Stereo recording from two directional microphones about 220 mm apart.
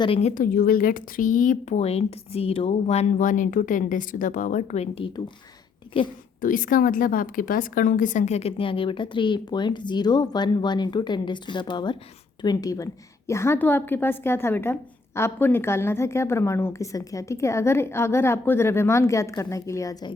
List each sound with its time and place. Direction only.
0.0 s speech: 30° left (ahead or behind)
6.4 s a woman's voice: 40° left (ahead or behind); by 20.1 s 15° left (ahead or behind)